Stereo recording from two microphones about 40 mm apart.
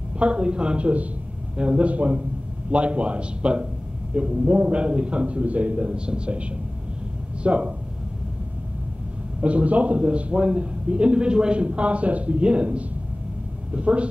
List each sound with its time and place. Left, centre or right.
0.2 s a man's voice: right
9.4 s a man's voice: right
11.6 s a man's voice: right